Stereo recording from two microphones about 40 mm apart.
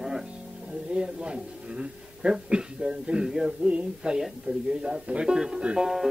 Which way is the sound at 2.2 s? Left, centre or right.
Right.